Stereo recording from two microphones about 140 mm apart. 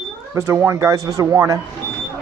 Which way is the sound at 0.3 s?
20° right (ahead or behind).